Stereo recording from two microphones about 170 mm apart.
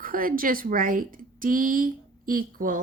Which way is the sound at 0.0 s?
55° right (ahead or behind).